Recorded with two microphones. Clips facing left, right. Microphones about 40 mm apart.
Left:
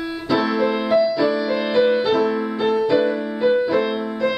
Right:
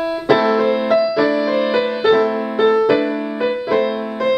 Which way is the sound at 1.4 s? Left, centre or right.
Right.